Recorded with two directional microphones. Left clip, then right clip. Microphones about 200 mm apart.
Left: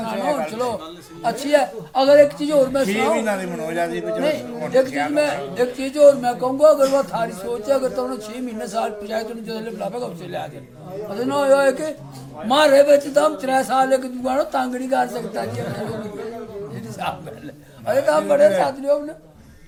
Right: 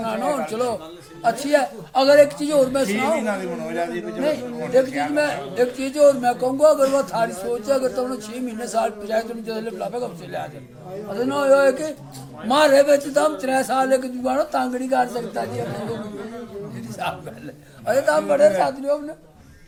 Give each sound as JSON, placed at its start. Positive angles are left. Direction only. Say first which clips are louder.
{"t": 0.0, "sound": "a sound", "louder": "left 1 dB", "side_deg": -20}
{"t": 1.2, "sound": "a man's voice", "louder": "left 1 dB", "side_deg": -15}
{"t": 3.2, "sound": "speech", "louder": "left 2 dB", "side_deg": 20}
{"t": 4.2, "sound": "speech", "louder": "right 2 dB", "side_deg": -10}
{"t": 4.9, "sound": "speech", "louder": "left 1 dB", "side_deg": 15}
{"t": 5.1, "sound": "speech", "louder": "left 1 dB", "side_deg": -10}
{"t": 17.0, "sound": "speech", "louder": "even", "side_deg": -15}